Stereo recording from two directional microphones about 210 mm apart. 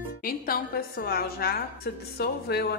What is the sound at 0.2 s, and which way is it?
A woman's voice, 45° left (ahead or behind).